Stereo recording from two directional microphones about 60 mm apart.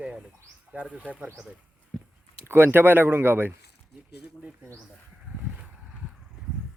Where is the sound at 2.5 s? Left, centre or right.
Right.